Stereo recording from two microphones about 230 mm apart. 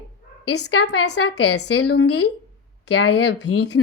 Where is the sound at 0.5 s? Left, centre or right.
Left.